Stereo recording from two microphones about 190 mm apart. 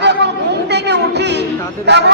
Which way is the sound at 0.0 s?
65° right (ahead or behind).